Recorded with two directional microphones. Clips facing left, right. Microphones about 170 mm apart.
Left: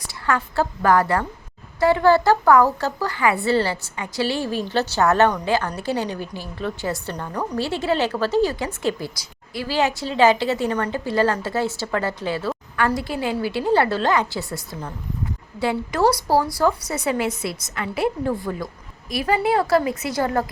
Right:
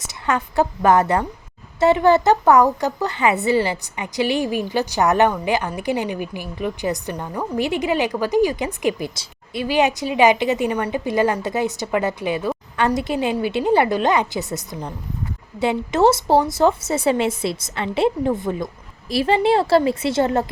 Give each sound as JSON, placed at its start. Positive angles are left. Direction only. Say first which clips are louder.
{"t": 0.0, "sound": "a woman's voice", "louder": "right 1 dB", "side_deg": -20}